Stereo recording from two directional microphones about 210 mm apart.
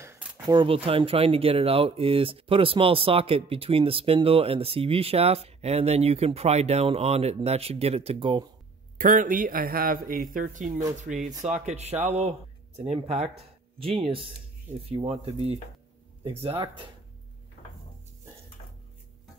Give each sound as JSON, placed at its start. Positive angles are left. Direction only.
{"t": 0.0, "sound": "a sound", "side_deg": -10}
{"t": 0.5, "sound": "speech", "side_deg": -25}
{"t": 8.9, "sound": "speech", "side_deg": -40}
{"t": 11.4, "sound": "speech", "side_deg": -30}